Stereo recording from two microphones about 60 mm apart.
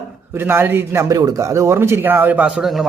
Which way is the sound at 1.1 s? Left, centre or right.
Right.